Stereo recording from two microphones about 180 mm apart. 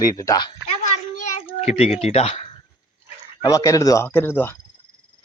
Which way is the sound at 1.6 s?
35° left (ahead or behind).